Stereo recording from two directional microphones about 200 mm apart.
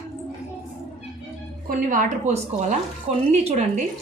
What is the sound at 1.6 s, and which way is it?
Speech, 40° right (ahead or behind).